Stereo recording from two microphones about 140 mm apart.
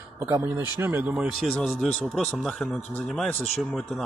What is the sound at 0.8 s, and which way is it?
Speech, 15° right (ahead or behind).